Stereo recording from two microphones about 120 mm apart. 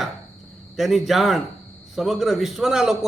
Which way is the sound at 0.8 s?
Centre (ahead or behind).